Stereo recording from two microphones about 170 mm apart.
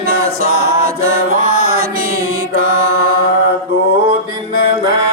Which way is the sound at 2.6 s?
55° right (ahead or behind).